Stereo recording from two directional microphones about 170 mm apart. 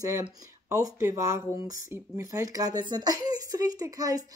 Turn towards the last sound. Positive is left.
turn(degrees=-20)  # may be behind; listen again after turning